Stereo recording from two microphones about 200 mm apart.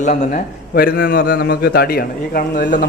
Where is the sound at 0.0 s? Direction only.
40° left (ahead or behind).